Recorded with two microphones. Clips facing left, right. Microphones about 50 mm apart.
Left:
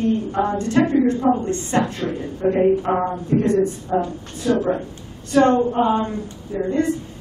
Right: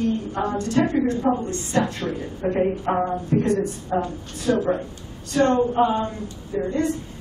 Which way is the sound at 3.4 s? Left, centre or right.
Left.